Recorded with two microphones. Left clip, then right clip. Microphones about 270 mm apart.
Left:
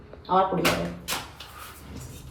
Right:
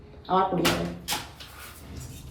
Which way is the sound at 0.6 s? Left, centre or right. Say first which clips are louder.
Left 1 dB; centre.